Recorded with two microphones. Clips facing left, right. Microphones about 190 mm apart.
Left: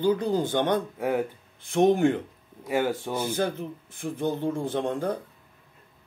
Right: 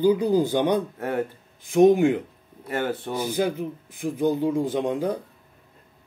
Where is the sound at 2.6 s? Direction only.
10° left (ahead or behind).